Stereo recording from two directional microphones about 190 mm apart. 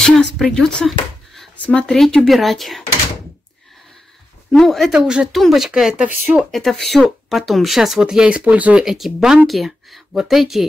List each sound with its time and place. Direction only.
0.0 s speech: centre (ahead or behind)
4.5 s speech: centre (ahead or behind)